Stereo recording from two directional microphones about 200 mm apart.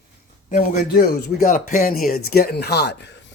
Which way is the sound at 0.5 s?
40° left (ahead or behind).